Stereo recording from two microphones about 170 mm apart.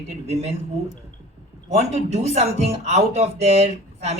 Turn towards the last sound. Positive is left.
turn(degrees=-40)  # may be behind; listen again after turning